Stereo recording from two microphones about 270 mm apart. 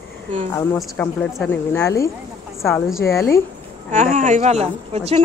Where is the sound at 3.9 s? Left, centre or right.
Right.